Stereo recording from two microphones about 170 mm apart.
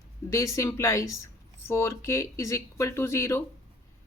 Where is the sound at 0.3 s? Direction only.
20° left (ahead or behind).